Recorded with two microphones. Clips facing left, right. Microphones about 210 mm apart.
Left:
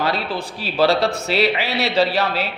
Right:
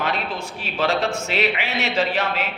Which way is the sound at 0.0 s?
35° left (ahead or behind).